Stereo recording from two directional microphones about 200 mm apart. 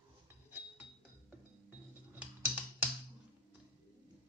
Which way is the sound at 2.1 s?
5° right (ahead or behind).